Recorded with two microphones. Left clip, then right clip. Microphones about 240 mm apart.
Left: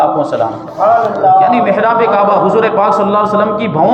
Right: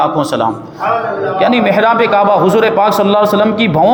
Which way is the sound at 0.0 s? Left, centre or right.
Right.